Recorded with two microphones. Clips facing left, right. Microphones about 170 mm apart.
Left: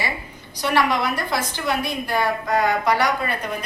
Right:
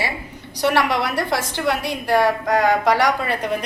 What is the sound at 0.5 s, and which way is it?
A woman's voice, 70° right (ahead or behind).